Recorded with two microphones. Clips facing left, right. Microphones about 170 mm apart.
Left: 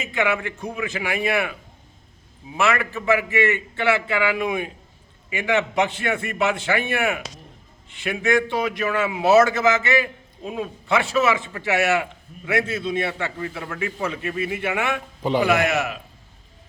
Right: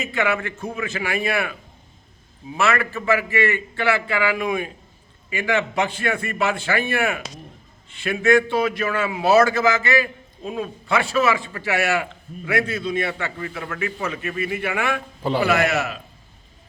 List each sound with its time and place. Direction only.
0.0 s a man's voice: 20° left (ahead or behind)
2.6 s a man's voice: 15° left (ahead or behind)